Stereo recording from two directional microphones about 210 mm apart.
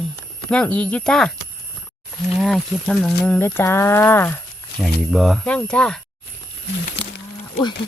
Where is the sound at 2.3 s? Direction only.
Centre (ahead or behind).